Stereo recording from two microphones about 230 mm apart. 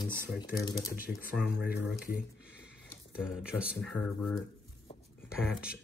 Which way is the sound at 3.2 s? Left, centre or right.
Centre.